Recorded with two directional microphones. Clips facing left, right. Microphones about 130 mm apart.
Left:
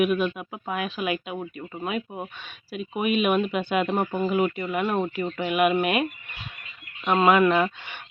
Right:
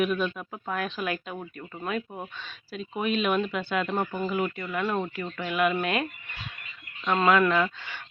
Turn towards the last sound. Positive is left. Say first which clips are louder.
# left 3 dB
turn(degrees=20)  # may be behind; listen again after turning